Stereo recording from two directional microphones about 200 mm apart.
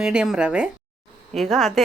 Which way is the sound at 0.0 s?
5° right (ahead or behind).